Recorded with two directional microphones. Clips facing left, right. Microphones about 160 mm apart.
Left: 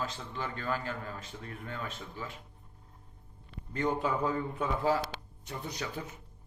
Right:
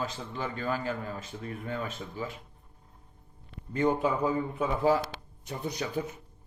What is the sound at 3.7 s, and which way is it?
Speech, 15° right (ahead or behind).